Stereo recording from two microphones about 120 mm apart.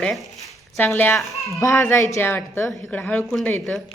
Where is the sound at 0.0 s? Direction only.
Centre (ahead or behind).